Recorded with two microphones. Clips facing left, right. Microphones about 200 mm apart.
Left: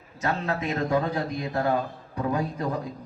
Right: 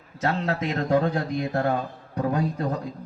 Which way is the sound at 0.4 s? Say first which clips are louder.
Right 1 dB; 65° right (ahead or behind).